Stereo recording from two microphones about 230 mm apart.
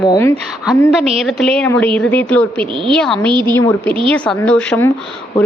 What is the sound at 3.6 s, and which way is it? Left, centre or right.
Speech, centre.